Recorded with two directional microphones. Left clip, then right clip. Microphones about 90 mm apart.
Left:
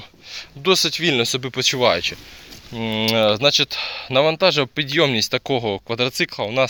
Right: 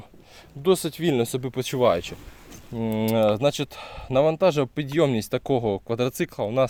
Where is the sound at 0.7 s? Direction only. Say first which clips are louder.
Left 5 dB; 60° right (ahead or behind).